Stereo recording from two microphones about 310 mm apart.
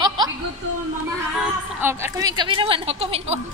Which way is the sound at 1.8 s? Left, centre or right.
Centre.